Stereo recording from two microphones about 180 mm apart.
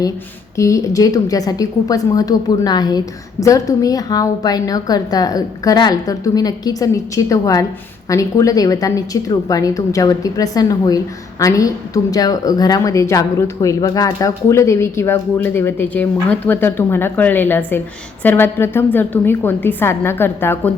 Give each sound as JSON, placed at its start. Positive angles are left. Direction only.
{"t": 0.5, "sound": "a woman's voice", "side_deg": 15}